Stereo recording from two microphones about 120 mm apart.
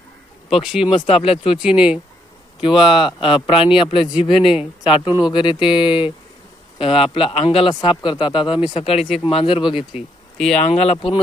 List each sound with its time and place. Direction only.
0.5 s speech: 5° right (ahead or behind)
0.9 s a man's voice: 50° left (ahead or behind)
1.5 s speech: 10° right (ahead or behind)
2.6 s a man's voice: 45° left (ahead or behind)
4.4 s speech: 5° right (ahead or behind)
5.2 s a man's voice: 40° left (ahead or behind)
9.9 s speech: 5° left (ahead or behind)
10.6 s speech: 65° left (ahead or behind)